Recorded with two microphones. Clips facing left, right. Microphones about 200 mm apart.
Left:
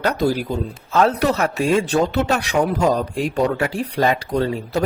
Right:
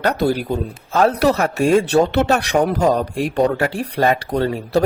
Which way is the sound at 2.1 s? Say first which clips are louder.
Right 3 dB; 65° right (ahead or behind).